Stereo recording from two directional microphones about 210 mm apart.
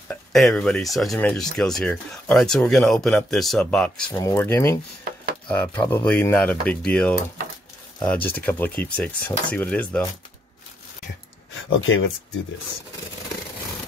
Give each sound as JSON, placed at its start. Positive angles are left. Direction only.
{"t": 0.1, "sound": "speech", "side_deg": 0}
{"t": 4.1, "sound": "speech", "side_deg": 15}
{"t": 11.8, "sound": "speech", "side_deg": 65}